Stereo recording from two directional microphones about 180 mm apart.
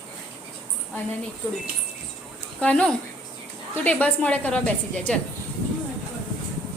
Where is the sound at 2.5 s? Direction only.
5° left (ahead or behind).